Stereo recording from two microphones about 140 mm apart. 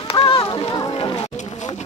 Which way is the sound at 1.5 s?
55° left (ahead or behind).